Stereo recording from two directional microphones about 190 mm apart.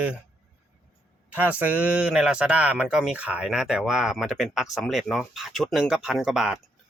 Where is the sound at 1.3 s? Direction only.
10° right (ahead or behind).